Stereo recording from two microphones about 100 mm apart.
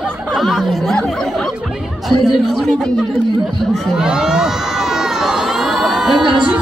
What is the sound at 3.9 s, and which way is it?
Crowd, 5° right (ahead or behind).